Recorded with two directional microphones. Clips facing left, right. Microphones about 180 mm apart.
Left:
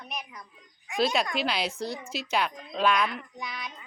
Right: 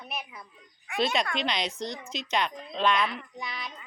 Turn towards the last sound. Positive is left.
turn(degrees=0)  # may be behind; listen again after turning